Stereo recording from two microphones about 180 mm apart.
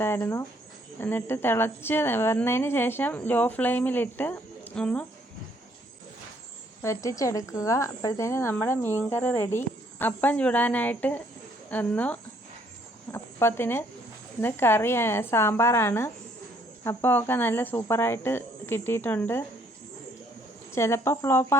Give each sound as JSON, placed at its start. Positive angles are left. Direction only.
{"t": 0.0, "sound": "a woman's voice", "side_deg": 15}
{"t": 6.8, "sound": "a woman's voice", "side_deg": 15}
{"t": 20.7, "sound": "a woman's voice", "side_deg": 15}